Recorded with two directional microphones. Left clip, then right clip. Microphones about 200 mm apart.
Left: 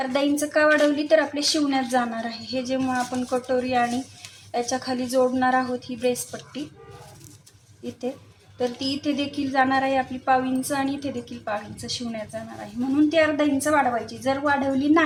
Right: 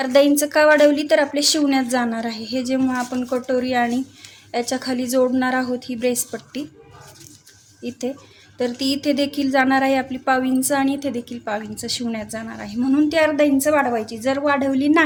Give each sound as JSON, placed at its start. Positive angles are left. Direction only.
{"t": 0.0, "sound": "a woman's voice", "side_deg": -50}
{"t": 8.5, "sound": "a woman's voice", "side_deg": -45}